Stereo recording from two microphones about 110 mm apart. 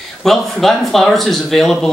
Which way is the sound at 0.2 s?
Centre (ahead or behind).